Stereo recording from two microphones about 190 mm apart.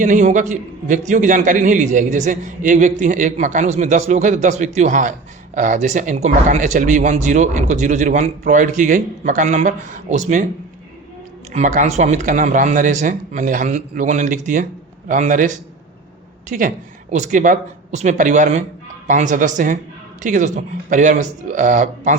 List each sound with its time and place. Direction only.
0.0 s a man's voice: 40° right (ahead or behind)
11.5 s a man's voice: 40° right (ahead or behind)